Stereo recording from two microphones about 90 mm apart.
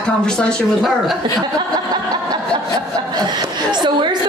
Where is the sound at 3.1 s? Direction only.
50° right (ahead or behind).